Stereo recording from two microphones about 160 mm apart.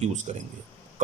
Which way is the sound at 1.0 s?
50° right (ahead or behind).